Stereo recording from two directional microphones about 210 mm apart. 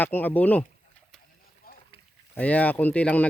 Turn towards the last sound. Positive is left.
turn(degrees=5)  # may be behind; listen again after turning